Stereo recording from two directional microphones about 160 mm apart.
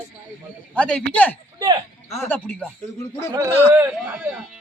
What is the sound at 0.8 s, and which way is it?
A man's voice, 5° left (ahead or behind).